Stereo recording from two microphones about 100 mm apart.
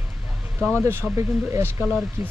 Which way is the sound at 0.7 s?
25° right (ahead or behind).